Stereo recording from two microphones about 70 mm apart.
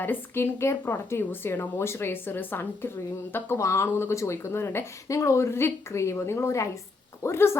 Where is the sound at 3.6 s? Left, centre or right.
Left.